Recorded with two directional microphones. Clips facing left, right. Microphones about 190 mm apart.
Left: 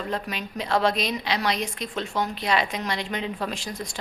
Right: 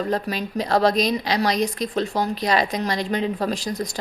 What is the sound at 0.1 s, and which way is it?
A woman's voice, 40° right (ahead or behind).